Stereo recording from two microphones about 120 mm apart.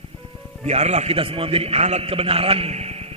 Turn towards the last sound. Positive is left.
turn(degrees=-60)  # may be behind; listen again after turning